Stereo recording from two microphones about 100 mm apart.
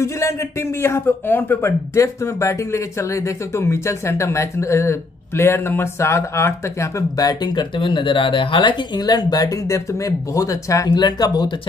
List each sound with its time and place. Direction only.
0.0 s a man's voice: 30° left (ahead or behind)